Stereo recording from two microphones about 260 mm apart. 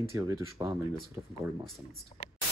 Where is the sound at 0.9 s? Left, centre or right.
Centre.